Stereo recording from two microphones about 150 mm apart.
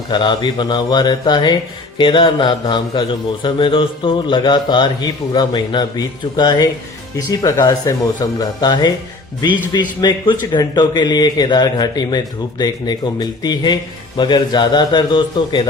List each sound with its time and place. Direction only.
0.1 s a man's voice: 30° left (ahead or behind)